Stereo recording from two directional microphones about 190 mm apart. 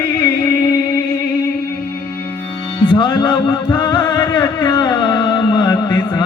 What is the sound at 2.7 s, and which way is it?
Music, 25° left (ahead or behind).